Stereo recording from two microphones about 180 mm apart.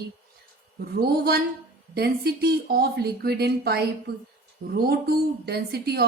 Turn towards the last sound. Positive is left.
turn(degrees=-60)  # may be behind; listen again after turning